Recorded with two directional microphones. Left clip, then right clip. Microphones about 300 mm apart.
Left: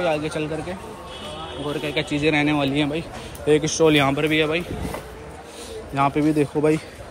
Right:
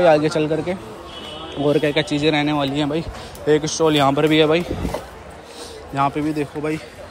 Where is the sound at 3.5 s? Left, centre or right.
Right.